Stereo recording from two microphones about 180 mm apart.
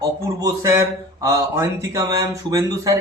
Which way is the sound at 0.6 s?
15° right (ahead or behind).